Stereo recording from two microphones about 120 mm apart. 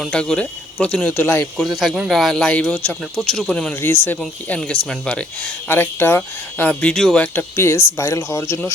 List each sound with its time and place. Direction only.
0.0 s speech: 5° left (ahead or behind)
1.5 s speech: centre (ahead or behind)
3.8 s speech: 15° left (ahead or behind)
5.6 s speech: 20° left (ahead or behind)
7.3 s speech: 20° left (ahead or behind)